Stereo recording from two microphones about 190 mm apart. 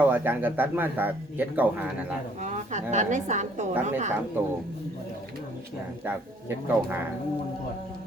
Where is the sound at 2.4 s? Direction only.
40° right (ahead or behind).